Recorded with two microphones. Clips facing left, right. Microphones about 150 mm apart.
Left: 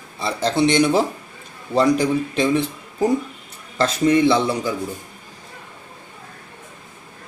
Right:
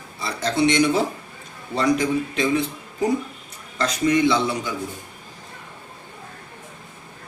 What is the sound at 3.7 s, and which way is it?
Speech, 30° left (ahead or behind).